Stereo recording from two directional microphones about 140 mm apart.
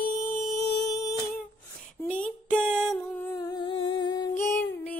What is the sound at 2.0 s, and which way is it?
Music, 10° left (ahead or behind).